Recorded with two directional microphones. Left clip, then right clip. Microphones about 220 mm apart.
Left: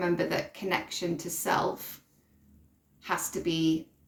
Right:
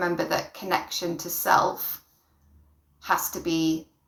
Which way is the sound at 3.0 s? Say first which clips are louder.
Right 6 dB; 40° left (ahead or behind).